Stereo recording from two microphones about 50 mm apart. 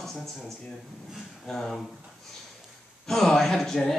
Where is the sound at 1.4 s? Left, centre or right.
Centre.